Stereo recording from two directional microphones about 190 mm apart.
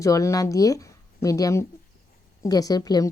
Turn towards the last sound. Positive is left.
turn(degrees=20)  # may be behind; listen again after turning